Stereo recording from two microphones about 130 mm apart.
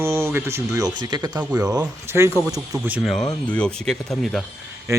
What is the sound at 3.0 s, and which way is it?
Speech, centre (ahead or behind).